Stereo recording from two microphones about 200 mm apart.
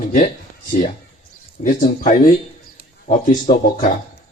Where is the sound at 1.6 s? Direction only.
40° left (ahead or behind).